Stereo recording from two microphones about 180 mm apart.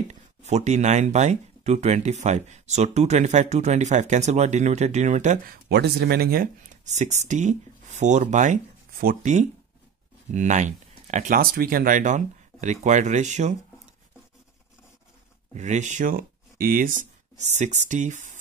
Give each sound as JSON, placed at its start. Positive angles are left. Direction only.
{"t": 0.1, "sound": "speech", "side_deg": -40}
{"t": 5.7, "sound": "speech", "side_deg": -65}
{"t": 15.5, "sound": "speech", "side_deg": -40}